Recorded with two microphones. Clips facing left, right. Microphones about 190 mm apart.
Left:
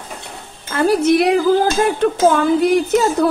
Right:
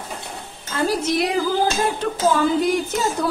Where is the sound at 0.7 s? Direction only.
60° left (ahead or behind).